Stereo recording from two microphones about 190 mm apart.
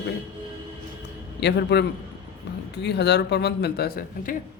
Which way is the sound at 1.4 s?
65° left (ahead or behind).